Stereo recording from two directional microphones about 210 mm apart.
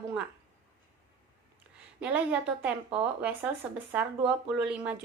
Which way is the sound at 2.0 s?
5° right (ahead or behind).